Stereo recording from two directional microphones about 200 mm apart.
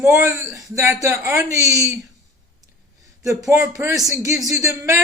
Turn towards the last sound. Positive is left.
turn(degrees=-15)  # may be behind; listen again after turning